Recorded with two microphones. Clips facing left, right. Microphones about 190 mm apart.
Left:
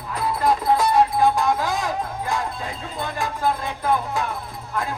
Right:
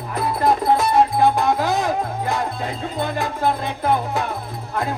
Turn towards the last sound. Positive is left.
turn(degrees=-25)  # may be behind; listen again after turning